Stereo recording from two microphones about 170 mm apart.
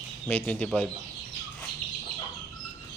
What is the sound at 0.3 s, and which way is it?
Speech, 10° left (ahead or behind).